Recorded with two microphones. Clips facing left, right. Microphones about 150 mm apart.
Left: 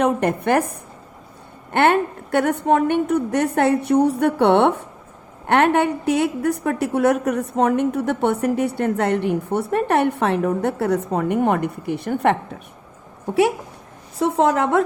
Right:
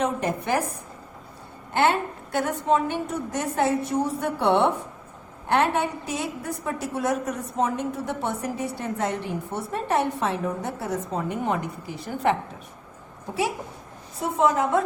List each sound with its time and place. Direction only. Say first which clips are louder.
0.0 s a woman's voice: left 7 dB; 60° left (ahead or behind)
14.2 s a woman's voice: left 4 dB; 80° left